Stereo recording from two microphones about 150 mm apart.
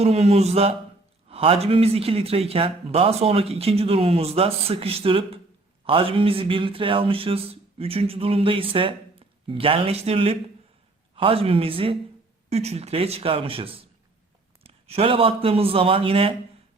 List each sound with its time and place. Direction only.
0.0 s a man's voice: 45° right (ahead or behind)